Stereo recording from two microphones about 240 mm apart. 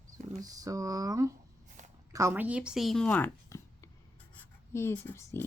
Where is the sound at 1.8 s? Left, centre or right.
Right.